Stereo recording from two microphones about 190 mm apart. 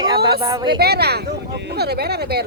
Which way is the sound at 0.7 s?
55° right (ahead or behind).